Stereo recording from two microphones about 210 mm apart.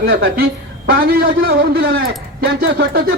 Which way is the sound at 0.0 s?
45° right (ahead or behind).